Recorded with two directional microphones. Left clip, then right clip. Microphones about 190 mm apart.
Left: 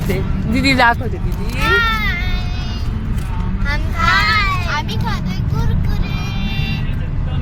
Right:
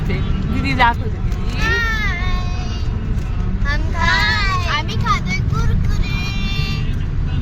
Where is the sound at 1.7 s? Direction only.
10° right (ahead or behind).